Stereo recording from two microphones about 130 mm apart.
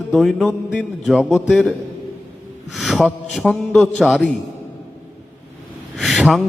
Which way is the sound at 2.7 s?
5° right (ahead or behind).